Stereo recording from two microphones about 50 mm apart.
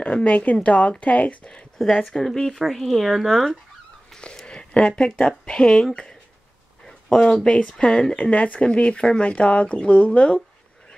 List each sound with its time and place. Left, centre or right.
0.0 s speech: left
2.0 s speech: centre
2.3 s speech: centre
4.1 s a sound: centre
4.5 s speech: centre
6.8 s a sound: centre
7.4 s speech: centre